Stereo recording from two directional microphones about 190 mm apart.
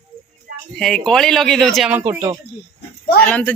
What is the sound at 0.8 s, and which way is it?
Speech, 5° left (ahead or behind).